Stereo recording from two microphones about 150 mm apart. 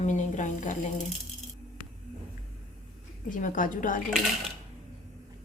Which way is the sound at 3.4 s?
60° left (ahead or behind).